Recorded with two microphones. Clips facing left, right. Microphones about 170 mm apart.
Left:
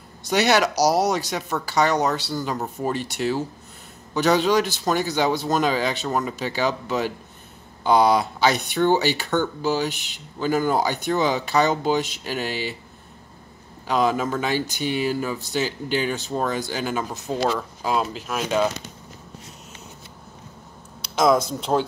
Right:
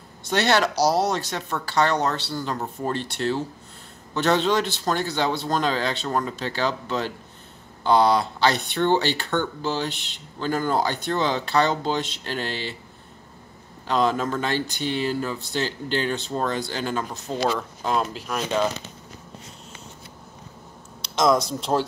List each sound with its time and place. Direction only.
0.3 s speech: 15° left (ahead or behind)
13.8 s speech: 10° left (ahead or behind)
21.1 s speech: 5° left (ahead or behind)